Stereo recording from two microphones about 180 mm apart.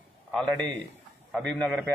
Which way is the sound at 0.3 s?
5° left (ahead or behind).